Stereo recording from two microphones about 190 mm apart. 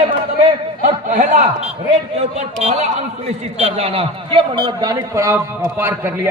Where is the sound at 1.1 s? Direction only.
45° right (ahead or behind).